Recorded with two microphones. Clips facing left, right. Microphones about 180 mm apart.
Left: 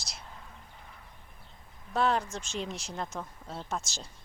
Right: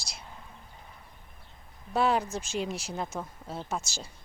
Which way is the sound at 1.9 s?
10° right (ahead or behind).